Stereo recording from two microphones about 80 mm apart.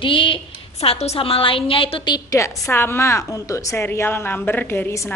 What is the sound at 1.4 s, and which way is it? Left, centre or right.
Speech, left.